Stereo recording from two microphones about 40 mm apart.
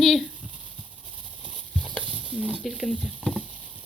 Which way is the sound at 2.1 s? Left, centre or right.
Left.